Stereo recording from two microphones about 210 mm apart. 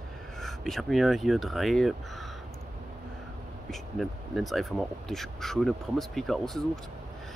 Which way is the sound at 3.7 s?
Centre (ahead or behind).